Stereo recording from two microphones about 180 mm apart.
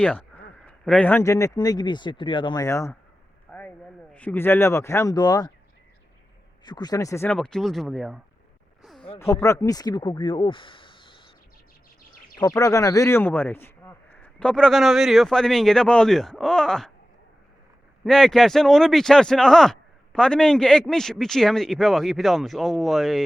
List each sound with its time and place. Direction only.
0.0 s a man's voice: 10° left (ahead or behind)
3.5 s a sound: 5° left (ahead or behind)
4.1 s speech: 10° left (ahead or behind)
6.7 s speech: 20° left (ahead or behind); by 8.2 s centre (ahead or behind)
8.8 s a sound: centre (ahead or behind)
9.1 s speech: 15° left (ahead or behind)
12.4 s speech: 20° left (ahead or behind); by 16.9 s 5° left (ahead or behind)
18.0 s speech: centre (ahead or behind)